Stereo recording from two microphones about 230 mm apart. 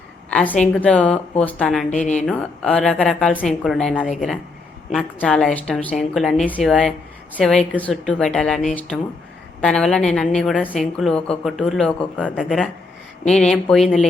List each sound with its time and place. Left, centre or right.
0.3 s a woman's voice: centre
1.9 s a woman's voice: left
2.2 s a woman's voice: centre